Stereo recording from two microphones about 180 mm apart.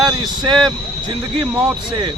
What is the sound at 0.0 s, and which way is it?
Speech, 25° right (ahead or behind).